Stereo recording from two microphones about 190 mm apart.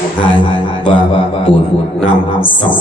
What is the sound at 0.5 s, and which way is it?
A man's voice, 25° left (ahead or behind).